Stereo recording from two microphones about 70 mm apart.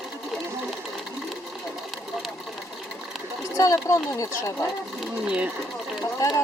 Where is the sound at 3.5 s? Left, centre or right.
Left.